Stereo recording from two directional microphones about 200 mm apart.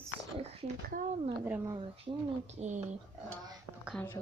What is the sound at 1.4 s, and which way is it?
Speech, 10° right (ahead or behind).